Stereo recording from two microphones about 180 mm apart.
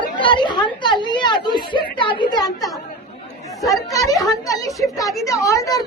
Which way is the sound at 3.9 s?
20° left (ahead or behind).